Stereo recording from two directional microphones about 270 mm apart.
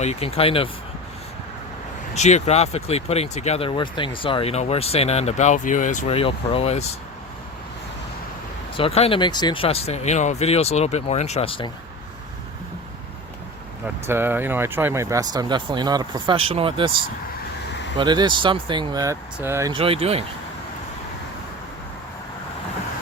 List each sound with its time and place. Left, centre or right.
0.0 s speech: left
2.1 s speech: left
8.7 s speech: left
13.8 s speech: centre
17.9 s speech: centre